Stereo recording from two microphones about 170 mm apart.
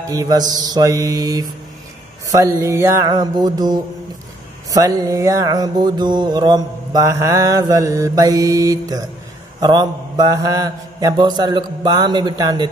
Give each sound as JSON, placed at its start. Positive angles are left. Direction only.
{"t": 0.1, "sound": "music", "side_deg": -20}